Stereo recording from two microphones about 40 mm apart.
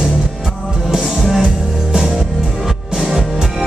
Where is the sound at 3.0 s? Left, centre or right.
Centre.